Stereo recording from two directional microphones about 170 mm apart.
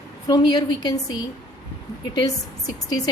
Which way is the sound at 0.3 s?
25° left (ahead or behind).